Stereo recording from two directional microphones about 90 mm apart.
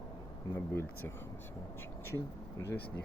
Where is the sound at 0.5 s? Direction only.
30° left (ahead or behind).